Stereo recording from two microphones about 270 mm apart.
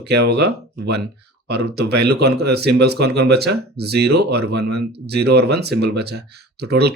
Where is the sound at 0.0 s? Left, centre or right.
Right.